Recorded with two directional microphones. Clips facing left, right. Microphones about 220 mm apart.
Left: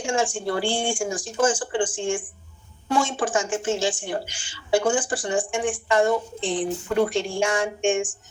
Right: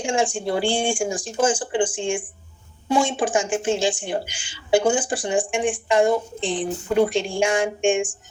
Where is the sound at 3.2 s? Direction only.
25° right (ahead or behind).